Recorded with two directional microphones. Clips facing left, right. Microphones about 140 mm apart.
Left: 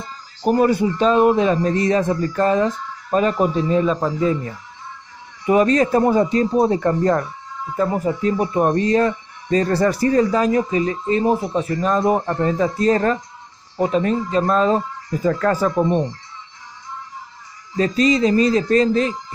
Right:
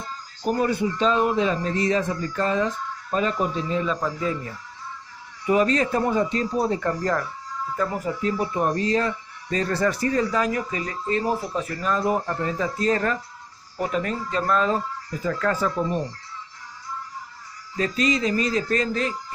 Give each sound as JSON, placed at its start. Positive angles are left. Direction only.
{"t": 0.5, "sound": "a man's voice", "side_deg": 45}
{"t": 5.5, "sound": "speech", "side_deg": 40}
{"t": 11.8, "sound": "speech", "side_deg": 40}
{"t": 15.0, "sound": "speech", "side_deg": 40}
{"t": 15.9, "sound": "speech", "side_deg": 20}
{"t": 17.7, "sound": "speech", "side_deg": 35}